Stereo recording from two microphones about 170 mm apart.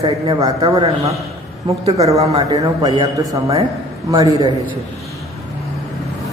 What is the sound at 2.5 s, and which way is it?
Speech, 25° right (ahead or behind).